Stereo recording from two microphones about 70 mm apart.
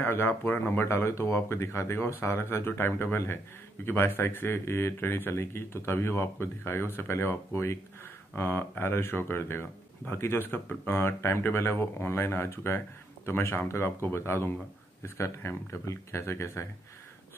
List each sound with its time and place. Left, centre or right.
0.0 s speech: left